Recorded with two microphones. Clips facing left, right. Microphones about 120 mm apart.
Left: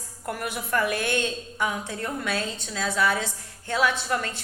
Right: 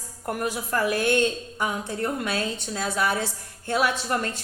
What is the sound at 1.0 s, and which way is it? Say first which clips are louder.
A woman's voice: right 5 dB; 45° right (ahead or behind).